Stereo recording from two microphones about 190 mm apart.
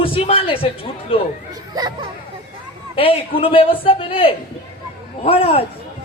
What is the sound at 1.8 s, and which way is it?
Speech, 20° right (ahead or behind).